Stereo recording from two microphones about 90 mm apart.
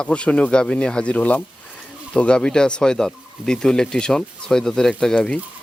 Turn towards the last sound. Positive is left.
turn(degrees=10)  # may be behind; listen again after turning